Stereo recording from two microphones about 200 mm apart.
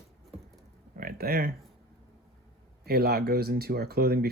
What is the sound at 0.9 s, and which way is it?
Speech, 45° right (ahead or behind).